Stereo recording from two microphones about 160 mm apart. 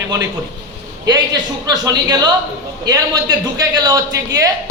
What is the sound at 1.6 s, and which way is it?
Speech, 25° right (ahead or behind).